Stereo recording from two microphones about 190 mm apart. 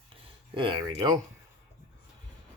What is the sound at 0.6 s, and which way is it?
Speech, 25° right (ahead or behind).